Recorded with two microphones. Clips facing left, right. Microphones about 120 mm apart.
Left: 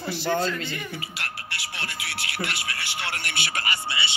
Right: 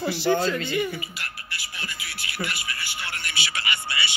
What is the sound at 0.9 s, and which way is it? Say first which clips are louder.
Speech: left 1 dB; 75° left (ahead or behind).